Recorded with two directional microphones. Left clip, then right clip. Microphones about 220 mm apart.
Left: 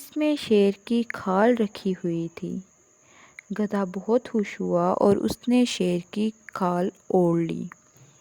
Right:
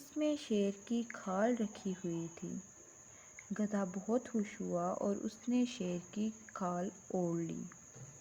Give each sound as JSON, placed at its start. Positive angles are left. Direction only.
{"t": 0.1, "sound": "speech", "side_deg": 45}